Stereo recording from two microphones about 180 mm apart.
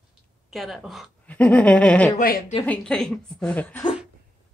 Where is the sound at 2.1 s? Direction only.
55° left (ahead or behind).